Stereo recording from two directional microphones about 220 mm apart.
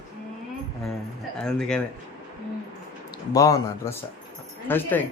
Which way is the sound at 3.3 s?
15° left (ahead or behind).